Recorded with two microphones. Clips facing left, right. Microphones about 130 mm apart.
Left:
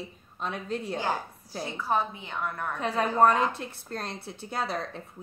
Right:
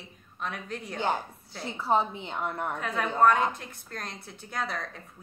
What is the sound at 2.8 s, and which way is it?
A woman's voice, 30° left (ahead or behind).